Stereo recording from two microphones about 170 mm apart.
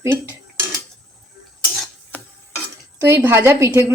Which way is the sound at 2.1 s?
10° left (ahead or behind).